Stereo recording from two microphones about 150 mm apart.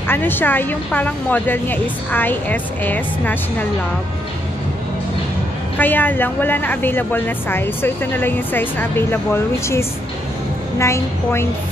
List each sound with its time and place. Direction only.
0.1 s a woman's voice: 15° left (ahead or behind)
5.8 s a woman's voice: 10° left (ahead or behind)